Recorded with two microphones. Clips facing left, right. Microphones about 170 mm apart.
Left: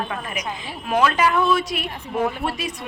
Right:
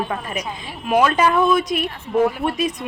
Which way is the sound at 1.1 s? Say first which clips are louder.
Right 3 dB; 25° right (ahead or behind).